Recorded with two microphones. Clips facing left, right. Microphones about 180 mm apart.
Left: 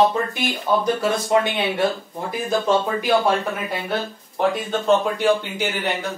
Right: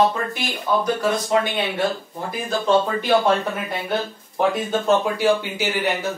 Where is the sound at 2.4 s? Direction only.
10° left (ahead or behind).